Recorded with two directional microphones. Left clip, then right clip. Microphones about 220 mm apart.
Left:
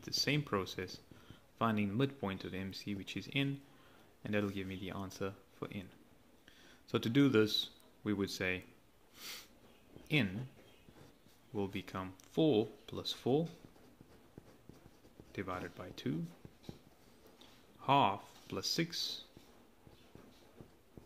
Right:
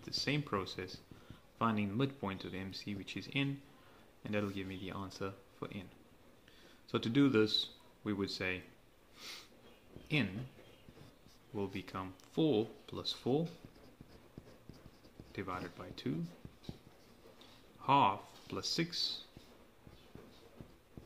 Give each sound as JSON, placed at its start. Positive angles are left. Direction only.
{"t": 0.0, "sound": "speech", "side_deg": 15}
{"t": 6.9, "sound": "speech", "side_deg": 15}
{"t": 10.0, "sound": "speech", "side_deg": 15}
{"t": 11.5, "sound": "speech", "side_deg": 15}
{"t": 15.3, "sound": "speech", "side_deg": 15}
{"t": 17.4, "sound": "speech", "side_deg": 15}